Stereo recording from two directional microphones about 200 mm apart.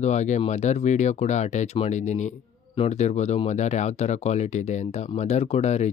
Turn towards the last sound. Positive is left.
turn(degrees=35)  # may be behind; listen again after turning